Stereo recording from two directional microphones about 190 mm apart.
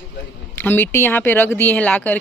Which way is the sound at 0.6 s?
10° left (ahead or behind).